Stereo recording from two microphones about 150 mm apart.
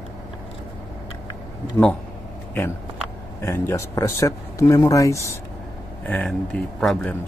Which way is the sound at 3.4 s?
20° left (ahead or behind).